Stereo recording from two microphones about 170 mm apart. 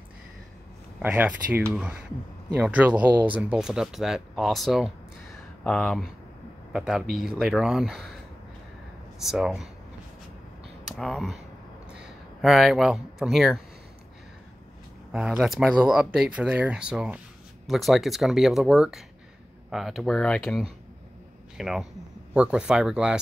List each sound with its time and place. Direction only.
0.9 s speech: 10° right (ahead or behind)
9.2 s speech: 5° right (ahead or behind)
11.0 s speech: centre (ahead or behind)
15.1 s speech: 5° right (ahead or behind)